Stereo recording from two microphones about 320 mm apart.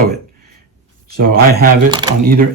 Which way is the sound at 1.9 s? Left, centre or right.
Centre.